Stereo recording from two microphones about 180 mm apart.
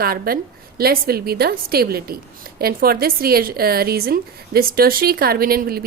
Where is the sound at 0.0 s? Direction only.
55° right (ahead or behind).